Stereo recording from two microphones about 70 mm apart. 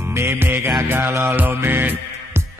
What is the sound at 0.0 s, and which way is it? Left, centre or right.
Music, right.